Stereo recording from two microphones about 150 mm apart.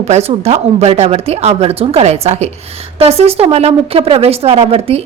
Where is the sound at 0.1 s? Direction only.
45° right (ahead or behind).